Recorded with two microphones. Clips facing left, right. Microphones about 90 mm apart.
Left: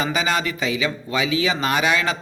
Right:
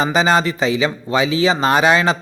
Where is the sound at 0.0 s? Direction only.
30° right (ahead or behind).